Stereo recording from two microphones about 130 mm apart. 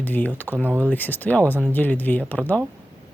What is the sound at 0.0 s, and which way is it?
Speech, 15° left (ahead or behind).